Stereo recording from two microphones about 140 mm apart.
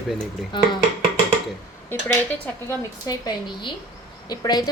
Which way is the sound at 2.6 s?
30° left (ahead or behind).